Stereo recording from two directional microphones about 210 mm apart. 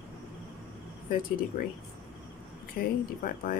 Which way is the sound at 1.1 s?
40° left (ahead or behind).